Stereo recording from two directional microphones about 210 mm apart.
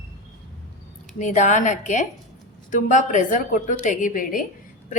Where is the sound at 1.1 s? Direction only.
35° left (ahead or behind).